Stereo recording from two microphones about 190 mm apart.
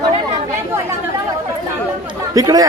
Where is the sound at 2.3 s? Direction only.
20° right (ahead or behind).